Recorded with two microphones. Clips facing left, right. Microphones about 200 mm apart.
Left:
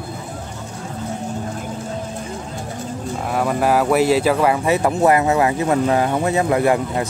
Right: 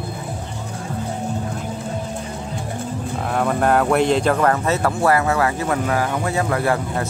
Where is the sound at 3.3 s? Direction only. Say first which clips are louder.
Even; 5° left (ahead or behind).